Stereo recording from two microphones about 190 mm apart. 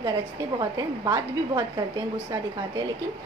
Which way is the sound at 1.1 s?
20° right (ahead or behind).